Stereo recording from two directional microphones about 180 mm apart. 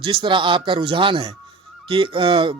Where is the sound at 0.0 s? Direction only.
30° right (ahead or behind).